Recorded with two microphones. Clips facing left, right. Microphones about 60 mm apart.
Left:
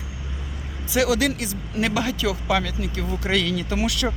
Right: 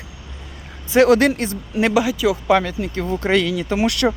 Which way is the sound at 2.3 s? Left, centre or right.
Right.